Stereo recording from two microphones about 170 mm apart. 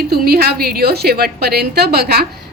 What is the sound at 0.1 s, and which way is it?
A woman's voice, 65° right (ahead or behind).